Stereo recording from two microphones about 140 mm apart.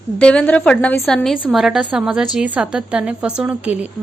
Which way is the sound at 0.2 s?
5° left (ahead or behind).